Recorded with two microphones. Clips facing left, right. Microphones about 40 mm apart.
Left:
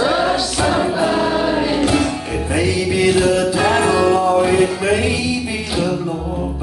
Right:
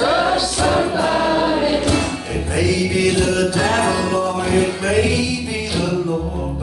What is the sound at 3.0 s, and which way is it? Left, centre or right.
Music, centre.